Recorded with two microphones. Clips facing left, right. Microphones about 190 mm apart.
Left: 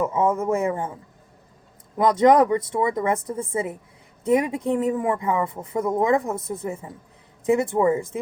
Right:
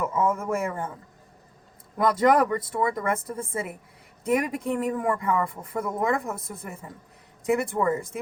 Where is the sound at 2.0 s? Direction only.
25° left (ahead or behind).